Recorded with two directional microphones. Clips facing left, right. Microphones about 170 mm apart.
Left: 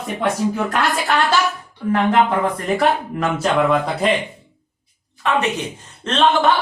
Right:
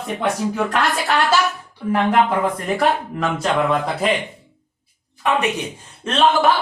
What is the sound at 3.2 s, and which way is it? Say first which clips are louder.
Speech: left 2 dB; centre (ahead or behind).